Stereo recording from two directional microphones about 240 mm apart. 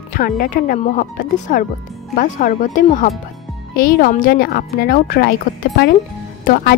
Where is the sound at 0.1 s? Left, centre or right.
Left.